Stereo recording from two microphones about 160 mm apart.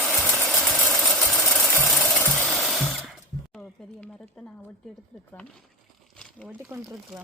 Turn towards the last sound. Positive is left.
turn(degrees=0)  # may be behind; listen again after turning